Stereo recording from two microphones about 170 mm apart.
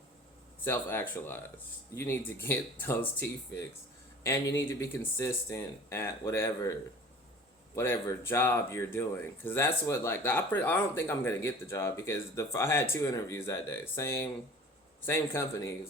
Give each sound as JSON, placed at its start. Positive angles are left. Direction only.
{"t": 0.6, "sound": "speech", "side_deg": 15}
{"t": 4.2, "sound": "speech", "side_deg": 15}
{"t": 7.8, "sound": "speech", "side_deg": 15}